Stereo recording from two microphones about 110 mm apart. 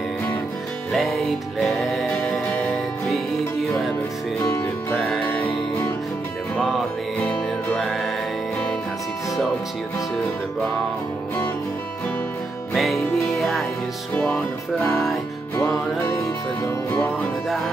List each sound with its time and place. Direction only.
0.9 s music: centre (ahead or behind)
4.4 s speech: 30° left (ahead or behind)
4.9 s music: 10° left (ahead or behind)
7.2 s music: 10° left (ahead or behind)
12.7 s music: centre (ahead or behind)
14.9 s music: centre (ahead or behind)
16.9 s music: 10° left (ahead or behind)